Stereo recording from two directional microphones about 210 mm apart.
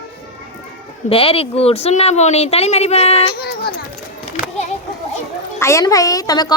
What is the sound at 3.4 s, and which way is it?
Speech, 45° left (ahead or behind).